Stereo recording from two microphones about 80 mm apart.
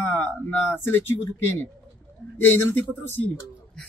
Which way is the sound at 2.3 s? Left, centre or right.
Left.